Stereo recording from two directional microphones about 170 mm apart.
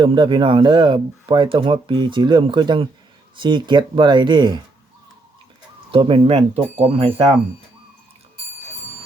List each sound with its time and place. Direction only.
0.0 s speech: 25° right (ahead or behind)
5.9 s speech: 30° right (ahead or behind)